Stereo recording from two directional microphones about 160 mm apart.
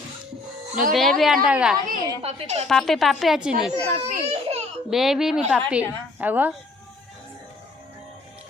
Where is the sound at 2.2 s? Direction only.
40° right (ahead or behind).